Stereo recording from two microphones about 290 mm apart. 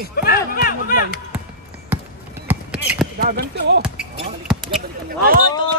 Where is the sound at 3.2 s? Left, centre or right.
Right.